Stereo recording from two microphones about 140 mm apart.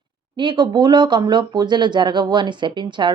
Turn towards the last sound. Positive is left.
turn(degrees=-35)  # may be behind; listen again after turning